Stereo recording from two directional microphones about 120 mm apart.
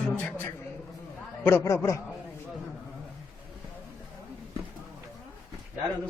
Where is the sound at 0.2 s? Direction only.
15° left (ahead or behind).